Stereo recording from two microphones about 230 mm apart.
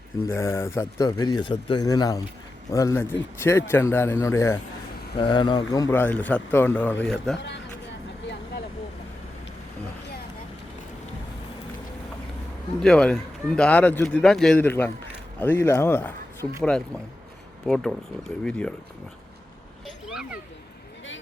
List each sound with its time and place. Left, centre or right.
0.3 s a man's voice: centre
12.8 s a man's voice: centre
17.7 s a man's voice: centre
20.1 s a sound: centre